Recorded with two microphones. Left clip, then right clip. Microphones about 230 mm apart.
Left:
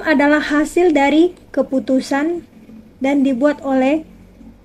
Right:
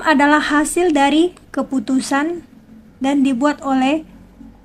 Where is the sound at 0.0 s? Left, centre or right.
Centre.